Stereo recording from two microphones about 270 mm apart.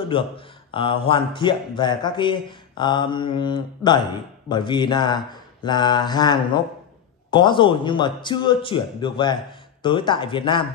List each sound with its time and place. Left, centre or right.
0.1 s speech: centre